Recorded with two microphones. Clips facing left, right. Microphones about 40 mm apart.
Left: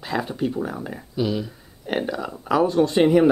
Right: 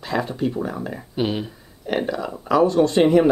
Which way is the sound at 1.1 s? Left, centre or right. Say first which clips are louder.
Even; right.